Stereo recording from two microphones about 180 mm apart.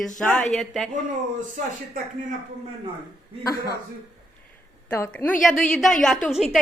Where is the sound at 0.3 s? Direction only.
Centre (ahead or behind).